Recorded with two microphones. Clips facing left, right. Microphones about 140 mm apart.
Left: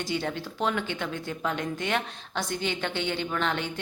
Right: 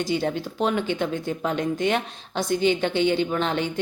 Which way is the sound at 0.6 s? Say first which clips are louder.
Right 5 dB; 20° right (ahead or behind).